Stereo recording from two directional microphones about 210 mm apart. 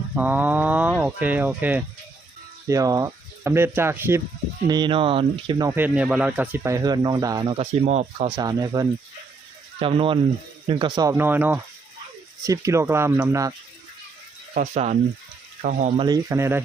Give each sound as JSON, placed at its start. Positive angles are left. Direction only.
{"t": 0.2, "sound": "speech", "side_deg": -10}
{"t": 4.7, "sound": "speech", "side_deg": -20}
{"t": 8.4, "sound": "speech", "side_deg": -20}
{"t": 14.5, "sound": "speech", "side_deg": -40}
{"t": 16.0, "sound": "speech", "side_deg": -20}